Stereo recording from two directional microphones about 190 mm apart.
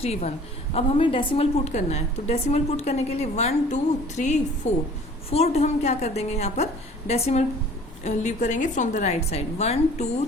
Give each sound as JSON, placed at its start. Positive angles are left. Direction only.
{"t": 0.0, "sound": "a woman's voice", "side_deg": 35}